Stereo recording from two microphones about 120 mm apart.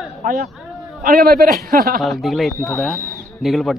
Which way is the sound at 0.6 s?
Centre (ahead or behind).